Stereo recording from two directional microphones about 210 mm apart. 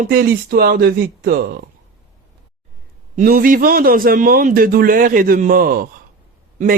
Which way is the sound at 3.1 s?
45° right (ahead or behind).